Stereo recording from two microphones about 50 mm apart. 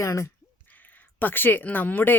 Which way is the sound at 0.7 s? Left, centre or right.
Left.